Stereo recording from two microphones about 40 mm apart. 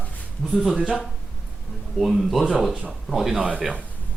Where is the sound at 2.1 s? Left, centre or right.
Centre.